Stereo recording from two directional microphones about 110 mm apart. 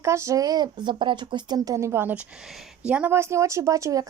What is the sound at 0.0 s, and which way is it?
A woman's voice, 25° right (ahead or behind).